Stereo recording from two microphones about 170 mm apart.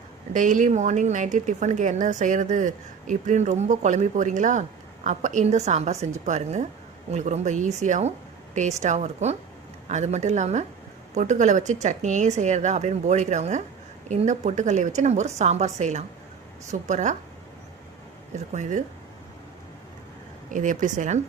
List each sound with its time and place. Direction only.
0.3 s a woman's voice: 50° right (ahead or behind)
18.3 s a woman's voice: 45° right (ahead or behind)
20.5 s a woman's voice: 50° right (ahead or behind)